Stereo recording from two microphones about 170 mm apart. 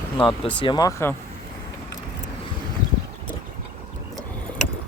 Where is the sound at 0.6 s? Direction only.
25° left (ahead or behind).